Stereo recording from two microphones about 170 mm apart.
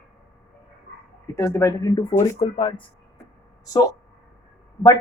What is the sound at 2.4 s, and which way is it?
Speech, 35° left (ahead or behind).